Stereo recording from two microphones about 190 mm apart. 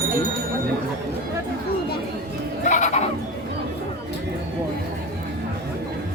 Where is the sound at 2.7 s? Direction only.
40° left (ahead or behind).